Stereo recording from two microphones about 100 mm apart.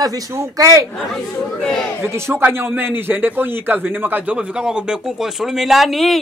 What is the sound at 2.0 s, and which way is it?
A man's voice, 25° right (ahead or behind).